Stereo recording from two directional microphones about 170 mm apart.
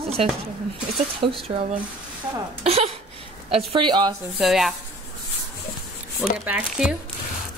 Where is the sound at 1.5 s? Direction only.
35° right (ahead or behind).